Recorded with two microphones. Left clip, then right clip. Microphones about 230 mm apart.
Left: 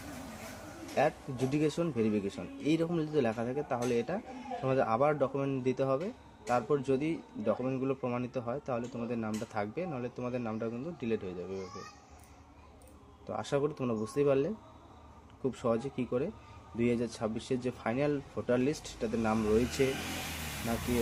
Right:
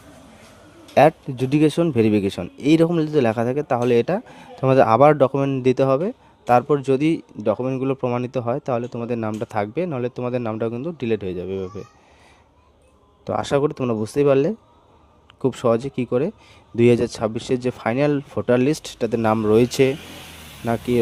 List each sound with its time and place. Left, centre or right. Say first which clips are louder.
0.9 s speech: right 15 dB; right
13.2 s speech: right 12 dB; right